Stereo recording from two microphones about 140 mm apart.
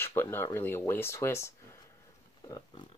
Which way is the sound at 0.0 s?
15° left (ahead or behind).